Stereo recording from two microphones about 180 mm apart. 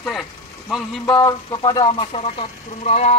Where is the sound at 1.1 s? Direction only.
25° left (ahead or behind).